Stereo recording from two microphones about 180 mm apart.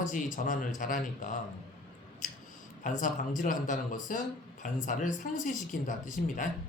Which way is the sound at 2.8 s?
45° left (ahead or behind).